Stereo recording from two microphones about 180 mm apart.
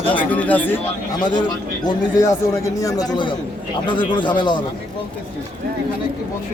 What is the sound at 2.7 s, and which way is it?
A man's voice, 20° left (ahead or behind).